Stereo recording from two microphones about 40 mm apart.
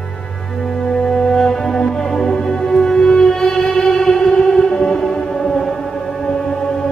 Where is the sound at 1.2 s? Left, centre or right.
Centre.